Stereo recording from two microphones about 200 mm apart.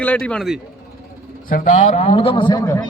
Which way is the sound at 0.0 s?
5° left (ahead or behind).